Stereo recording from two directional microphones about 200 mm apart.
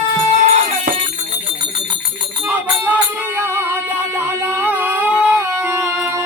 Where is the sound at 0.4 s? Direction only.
35° right (ahead or behind).